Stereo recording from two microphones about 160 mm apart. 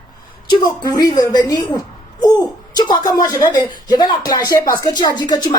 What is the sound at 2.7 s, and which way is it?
Speech, 25° left (ahead or behind).